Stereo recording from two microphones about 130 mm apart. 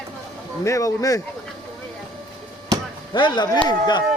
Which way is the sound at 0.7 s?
25° left (ahead or behind).